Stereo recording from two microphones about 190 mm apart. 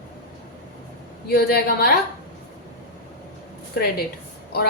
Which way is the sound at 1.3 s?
55° left (ahead or behind).